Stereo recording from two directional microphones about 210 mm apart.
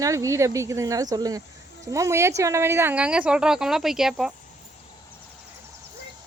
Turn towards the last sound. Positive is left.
turn(degrees=0)  # may be behind; listen again after turning